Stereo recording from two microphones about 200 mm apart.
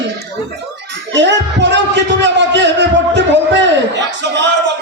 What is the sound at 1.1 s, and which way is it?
Speech, 60° right (ahead or behind).